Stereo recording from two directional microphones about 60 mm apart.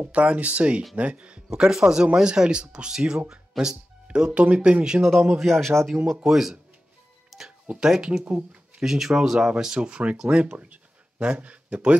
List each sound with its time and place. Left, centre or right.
0.0 s speech: right
1.5 s speech: centre
5.4 s speech: centre
5.9 s speech: centre
7.2 s music: centre
7.6 s speech: centre
8.4 s a sound: right
8.8 s speech: centre